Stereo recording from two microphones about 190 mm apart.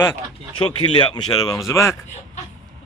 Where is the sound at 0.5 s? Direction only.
25° left (ahead or behind).